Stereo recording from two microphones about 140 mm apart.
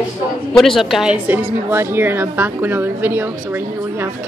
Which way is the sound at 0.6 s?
Centre (ahead or behind).